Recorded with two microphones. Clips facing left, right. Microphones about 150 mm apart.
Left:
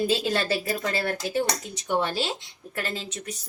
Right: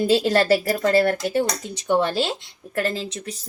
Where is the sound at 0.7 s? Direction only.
40° right (ahead or behind).